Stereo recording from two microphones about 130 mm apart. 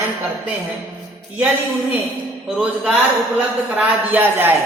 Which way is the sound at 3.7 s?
15° right (ahead or behind).